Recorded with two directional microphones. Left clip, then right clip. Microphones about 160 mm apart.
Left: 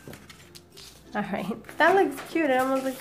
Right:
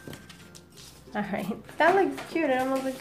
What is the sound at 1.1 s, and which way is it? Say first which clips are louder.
Speech: left 1 dB; 15° left (ahead or behind).